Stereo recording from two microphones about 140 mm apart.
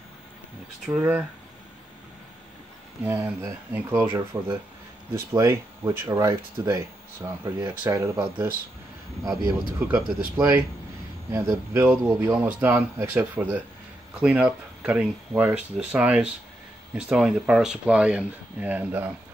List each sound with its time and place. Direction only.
0.8 s speech: 5° right (ahead or behind)
3.0 s speech: 10° right (ahead or behind)
11.3 s speech: 20° right (ahead or behind)